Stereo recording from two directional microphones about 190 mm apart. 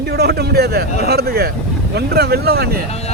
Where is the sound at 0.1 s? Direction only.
60° right (ahead or behind).